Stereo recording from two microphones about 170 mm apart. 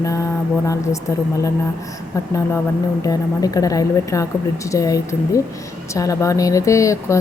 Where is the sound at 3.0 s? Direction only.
20° left (ahead or behind).